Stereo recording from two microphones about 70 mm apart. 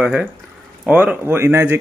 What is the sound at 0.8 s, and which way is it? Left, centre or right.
Speech, right.